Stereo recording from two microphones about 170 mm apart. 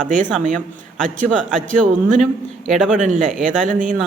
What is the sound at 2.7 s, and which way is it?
Speech, 5° right (ahead or behind).